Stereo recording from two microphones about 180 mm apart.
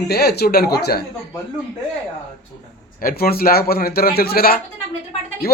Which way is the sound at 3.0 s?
60° left (ahead or behind).